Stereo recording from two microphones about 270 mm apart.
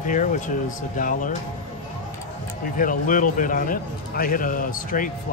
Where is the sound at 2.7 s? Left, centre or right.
Left.